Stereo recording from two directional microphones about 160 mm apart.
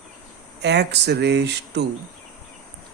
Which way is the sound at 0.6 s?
90° right.